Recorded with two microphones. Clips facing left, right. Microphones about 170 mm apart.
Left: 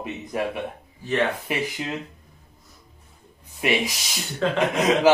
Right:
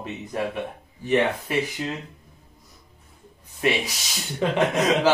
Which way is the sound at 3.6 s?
10° left (ahead or behind).